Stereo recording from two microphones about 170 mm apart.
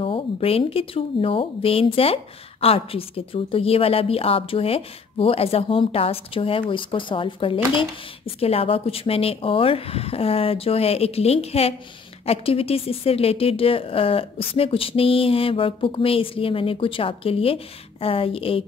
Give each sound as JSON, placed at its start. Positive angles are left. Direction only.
{"t": 0.0, "sound": "a woman's voice", "side_deg": 35}